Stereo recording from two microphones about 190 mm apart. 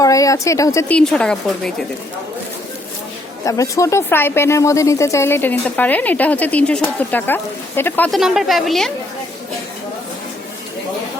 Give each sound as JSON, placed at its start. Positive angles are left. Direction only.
{"t": 0.0, "sound": "speech", "side_deg": 15}
{"t": 3.4, "sound": "a woman's voice", "side_deg": 15}